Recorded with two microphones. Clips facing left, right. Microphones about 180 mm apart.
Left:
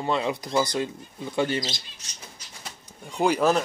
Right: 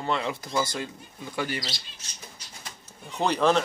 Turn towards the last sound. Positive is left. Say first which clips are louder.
# left 1 dB
turn(degrees=5)  # may be behind; listen again after turning